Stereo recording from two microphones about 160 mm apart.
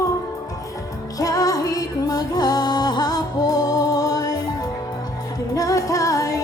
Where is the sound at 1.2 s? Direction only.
20° left (ahead or behind).